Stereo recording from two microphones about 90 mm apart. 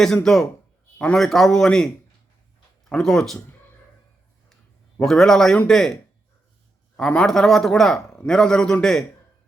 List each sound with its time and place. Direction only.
0.0 s a man's voice: 5° left (ahead or behind)
2.9 s a man's voice: 5° left (ahead or behind)
4.9 s a man's voice: 5° left (ahead or behind)